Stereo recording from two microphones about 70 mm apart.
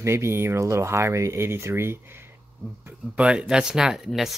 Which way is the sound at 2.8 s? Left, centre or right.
Centre.